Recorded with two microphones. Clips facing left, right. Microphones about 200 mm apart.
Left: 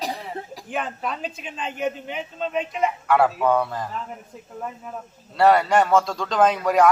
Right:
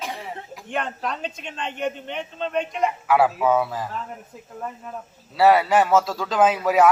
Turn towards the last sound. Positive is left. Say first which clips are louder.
# even
turn(degrees=-5)  # may be behind; listen again after turning